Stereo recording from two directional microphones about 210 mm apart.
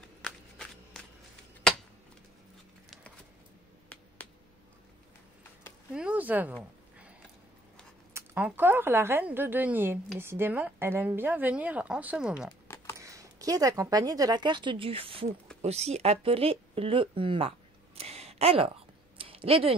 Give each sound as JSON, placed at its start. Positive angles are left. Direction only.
{"t": 0.2, "sound": "walk", "side_deg": 0}
{"t": 5.9, "sound": "a woman's voice", "side_deg": -5}
{"t": 8.1, "sound": "a woman's voice", "side_deg": -10}
{"t": 12.6, "sound": "a sound", "side_deg": 10}
{"t": 13.0, "sound": "a woman's voice", "side_deg": -15}